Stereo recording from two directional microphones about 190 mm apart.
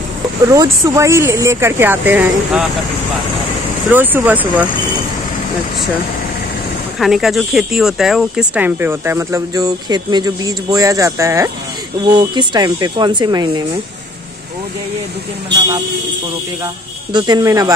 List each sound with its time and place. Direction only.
0.5 s speech: 15° right (ahead or behind)
3.9 s speech: 10° right (ahead or behind)
7.0 s speech: centre (ahead or behind); by 13.7 s 20° right (ahead or behind)
17.1 s speech: 20° right (ahead or behind)